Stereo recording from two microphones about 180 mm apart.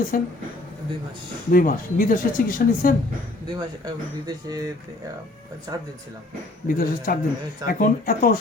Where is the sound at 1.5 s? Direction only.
50° left (ahead or behind).